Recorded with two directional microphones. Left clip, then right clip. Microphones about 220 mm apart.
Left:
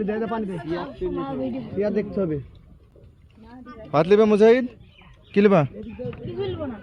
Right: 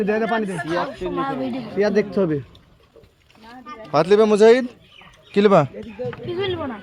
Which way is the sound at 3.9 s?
5° right (ahead or behind).